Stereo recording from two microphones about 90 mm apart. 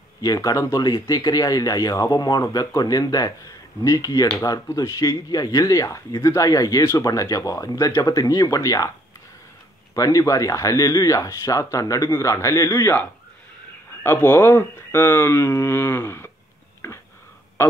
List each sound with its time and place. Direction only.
0.2 s speech: 40° left (ahead or behind)
9.9 s speech: 40° left (ahead or behind)
14.0 s speech: 25° left (ahead or behind)
16.8 s a sound: 30° left (ahead or behind)